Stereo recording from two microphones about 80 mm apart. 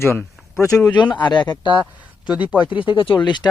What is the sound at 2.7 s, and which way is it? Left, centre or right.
Speech, left.